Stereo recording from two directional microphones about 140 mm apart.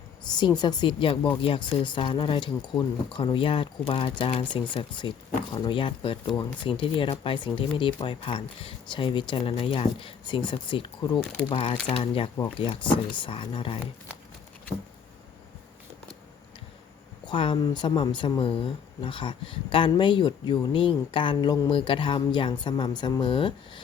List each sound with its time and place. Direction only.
0.3 s speech: 30° left (ahead or behind)
17.2 s speech: 35° left (ahead or behind)